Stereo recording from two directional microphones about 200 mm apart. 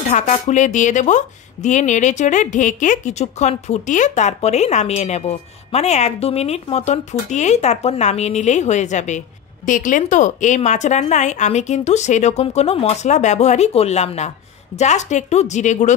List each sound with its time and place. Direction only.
0.1 s a woman's voice: 35° left (ahead or behind)